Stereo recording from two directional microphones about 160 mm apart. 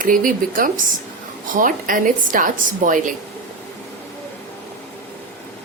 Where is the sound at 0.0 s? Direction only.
60° right (ahead or behind).